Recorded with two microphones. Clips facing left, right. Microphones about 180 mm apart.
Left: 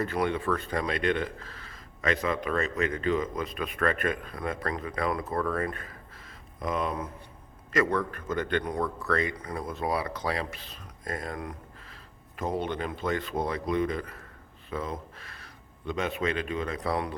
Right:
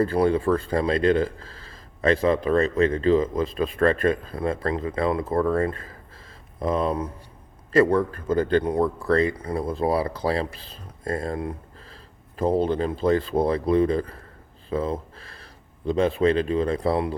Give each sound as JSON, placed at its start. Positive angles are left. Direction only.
{"t": 0.0, "sound": "speech", "side_deg": -30}
{"t": 14.7, "sound": "a sound", "side_deg": -30}
{"t": 15.9, "sound": "speech", "side_deg": -30}